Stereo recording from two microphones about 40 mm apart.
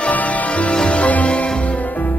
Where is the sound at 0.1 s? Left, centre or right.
Left.